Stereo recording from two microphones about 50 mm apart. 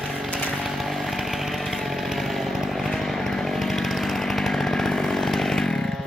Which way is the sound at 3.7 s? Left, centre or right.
Centre.